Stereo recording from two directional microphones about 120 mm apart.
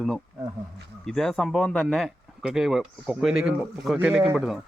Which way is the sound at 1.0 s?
5° left (ahead or behind).